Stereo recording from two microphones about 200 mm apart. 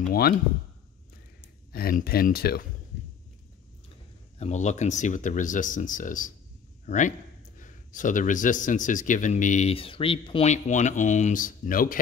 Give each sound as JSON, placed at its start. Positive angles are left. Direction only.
{"t": 1.7, "sound": "speech", "side_deg": 50}
{"t": 4.4, "sound": "speech", "side_deg": 35}